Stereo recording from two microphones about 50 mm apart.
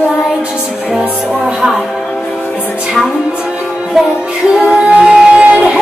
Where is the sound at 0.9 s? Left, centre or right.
Centre.